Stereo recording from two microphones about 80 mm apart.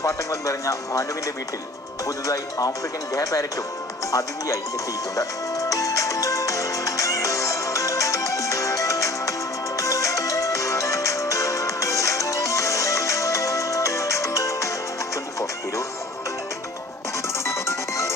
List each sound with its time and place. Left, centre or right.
0.0 s speech: left
2.0 s speech: left
5.1 s music: left
17.2 s music: left